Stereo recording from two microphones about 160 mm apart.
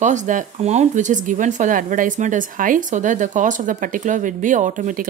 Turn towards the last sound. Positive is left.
turn(degrees=-55)  # may be behind; listen again after turning